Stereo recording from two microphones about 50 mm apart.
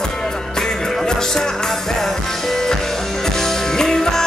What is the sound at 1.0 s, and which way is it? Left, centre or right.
Music, centre.